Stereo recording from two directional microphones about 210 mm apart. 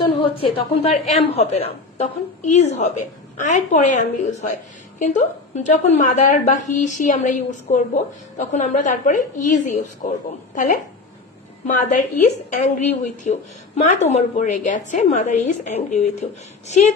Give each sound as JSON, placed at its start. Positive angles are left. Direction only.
{"t": 0.3, "sound": "a woman's voice", "side_deg": 25}